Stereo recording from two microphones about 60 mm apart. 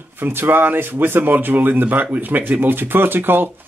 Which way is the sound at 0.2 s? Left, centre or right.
Right.